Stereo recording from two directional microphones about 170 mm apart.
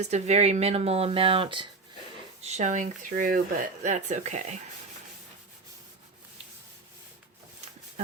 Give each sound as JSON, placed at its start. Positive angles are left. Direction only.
{"t": 0.0, "sound": "speech", "side_deg": -40}
{"t": 2.4, "sound": "speech", "side_deg": -40}